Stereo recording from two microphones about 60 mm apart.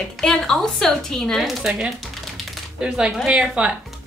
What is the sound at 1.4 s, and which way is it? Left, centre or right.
Speech, centre.